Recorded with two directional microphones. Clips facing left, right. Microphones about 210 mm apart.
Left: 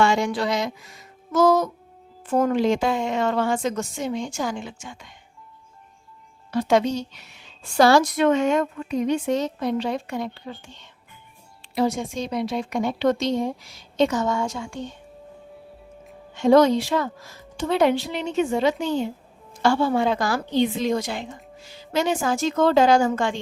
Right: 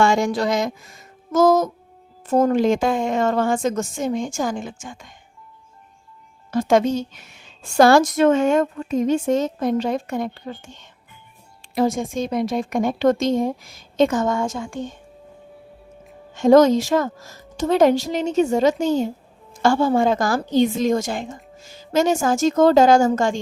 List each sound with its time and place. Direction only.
0.0 s music: 45° right (ahead or behind)
2.2 s a woman's voice: 40° right (ahead or behind)
6.5 s a woman's voice: 45° right (ahead or behind)
16.3 s a woman's voice: 45° right (ahead or behind)